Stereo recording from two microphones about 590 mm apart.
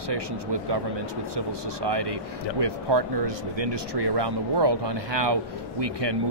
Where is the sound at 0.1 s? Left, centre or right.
Right.